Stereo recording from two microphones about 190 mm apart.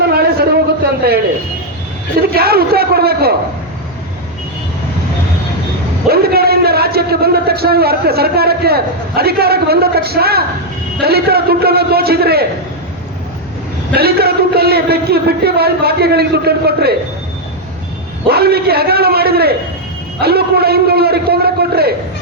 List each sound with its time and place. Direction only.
0.0 s a sound: 55° right (ahead or behind)
2.2 s a man's voice: 55° right (ahead or behind)
6.1 s a man's voice: 55° right (ahead or behind)
13.9 s speech: 55° right (ahead or behind)
18.3 s speech: 55° right (ahead or behind)